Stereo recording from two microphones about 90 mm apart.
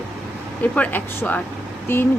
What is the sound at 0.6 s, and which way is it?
Speech, 15° left (ahead or behind).